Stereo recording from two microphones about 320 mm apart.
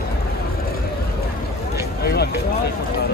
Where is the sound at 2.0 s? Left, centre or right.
Left.